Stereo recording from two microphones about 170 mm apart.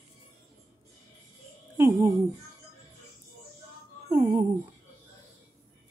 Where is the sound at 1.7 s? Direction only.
15° right (ahead or behind).